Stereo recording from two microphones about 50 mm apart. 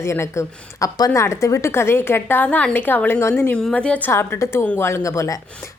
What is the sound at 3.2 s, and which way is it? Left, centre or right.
Speech, left.